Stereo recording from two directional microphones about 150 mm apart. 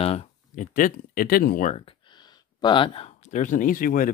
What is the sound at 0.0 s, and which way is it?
Speech, 40° left (ahead or behind).